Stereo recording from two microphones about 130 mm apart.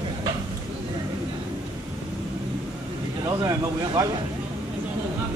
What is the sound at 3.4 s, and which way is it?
Speech, 25° right (ahead or behind).